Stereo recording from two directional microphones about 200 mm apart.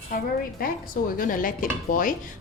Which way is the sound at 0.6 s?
45° left (ahead or behind).